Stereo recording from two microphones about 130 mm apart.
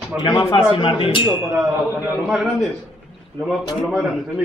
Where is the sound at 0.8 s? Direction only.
40° left (ahead or behind).